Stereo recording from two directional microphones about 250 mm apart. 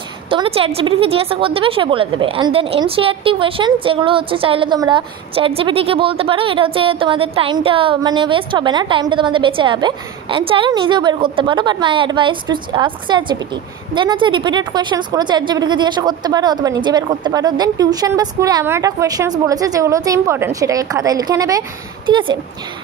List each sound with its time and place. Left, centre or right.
0.3 s a woman's voice: right